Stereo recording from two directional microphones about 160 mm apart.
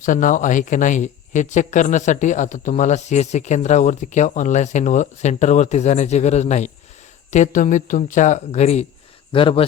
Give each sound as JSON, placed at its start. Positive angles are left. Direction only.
{"t": 0.0, "sound": "speech", "side_deg": 55}